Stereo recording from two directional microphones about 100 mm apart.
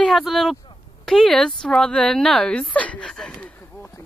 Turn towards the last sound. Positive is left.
turn(degrees=5)  # may be behind; listen again after turning